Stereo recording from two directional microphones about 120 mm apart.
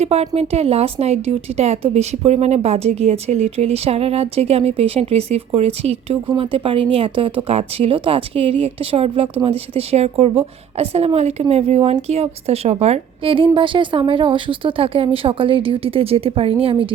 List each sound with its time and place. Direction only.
0.0 s a woman's voice: 60° right (ahead or behind)